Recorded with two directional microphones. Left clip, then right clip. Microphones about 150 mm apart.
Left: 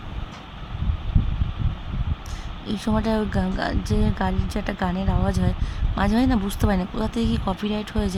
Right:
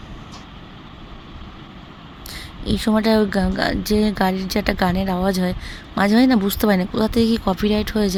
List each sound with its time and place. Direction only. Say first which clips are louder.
2.6 s a woman's voice: right 6 dB; 20° right (ahead or behind)